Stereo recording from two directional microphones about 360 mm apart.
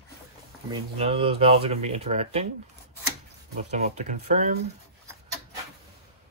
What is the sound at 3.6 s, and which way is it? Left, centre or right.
Speech, centre.